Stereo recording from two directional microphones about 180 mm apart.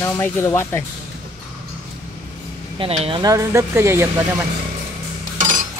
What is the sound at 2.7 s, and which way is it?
Speech, 30° right (ahead or behind).